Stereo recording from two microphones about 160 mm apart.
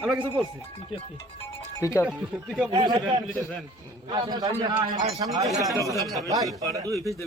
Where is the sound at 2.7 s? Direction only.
30° right (ahead or behind).